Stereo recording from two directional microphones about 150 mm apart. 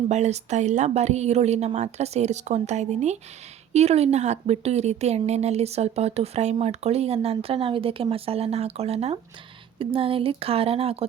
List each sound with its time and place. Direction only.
0.1 s speech: 50° right (ahead or behind)